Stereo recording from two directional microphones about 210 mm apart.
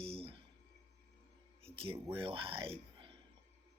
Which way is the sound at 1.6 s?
25° right (ahead or behind).